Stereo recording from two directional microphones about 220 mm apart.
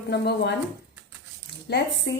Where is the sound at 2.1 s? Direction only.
55° left (ahead or behind).